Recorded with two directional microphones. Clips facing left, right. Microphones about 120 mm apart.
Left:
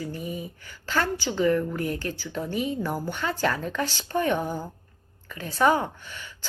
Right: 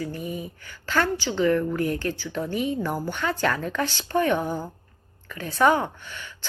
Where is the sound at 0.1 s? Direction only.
35° right (ahead or behind).